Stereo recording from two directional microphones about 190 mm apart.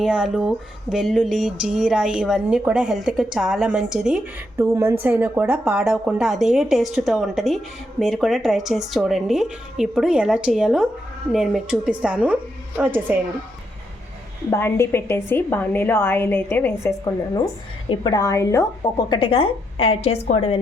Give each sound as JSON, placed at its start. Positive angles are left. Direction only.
{"t": 0.0, "sound": "a woman's voice", "side_deg": -5}
{"t": 14.5, "sound": "a woman's voice", "side_deg": 15}
{"t": 17.8, "sound": "a woman's voice", "side_deg": 25}